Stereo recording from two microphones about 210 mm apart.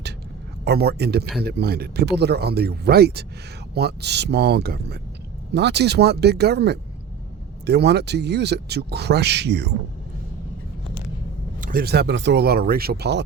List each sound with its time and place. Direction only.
0.6 s speech: 50° right (ahead or behind)
11.6 s speech: 45° right (ahead or behind)